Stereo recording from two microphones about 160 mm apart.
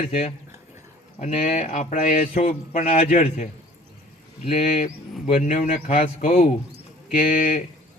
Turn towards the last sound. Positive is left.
turn(degrees=60)  # may be behind; listen again after turning